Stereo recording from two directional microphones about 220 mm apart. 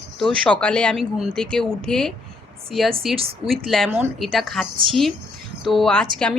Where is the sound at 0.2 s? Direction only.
5° left (ahead or behind).